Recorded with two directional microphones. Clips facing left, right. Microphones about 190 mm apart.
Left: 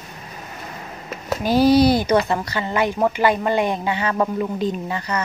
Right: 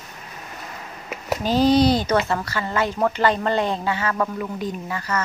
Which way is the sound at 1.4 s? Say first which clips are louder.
Left 2 dB; 10° left (ahead or behind).